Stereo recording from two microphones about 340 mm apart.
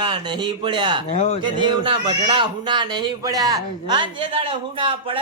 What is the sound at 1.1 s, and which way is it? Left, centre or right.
Speech, centre.